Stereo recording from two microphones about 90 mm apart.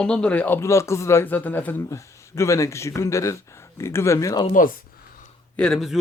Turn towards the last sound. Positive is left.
turn(degrees=10)  # may be behind; listen again after turning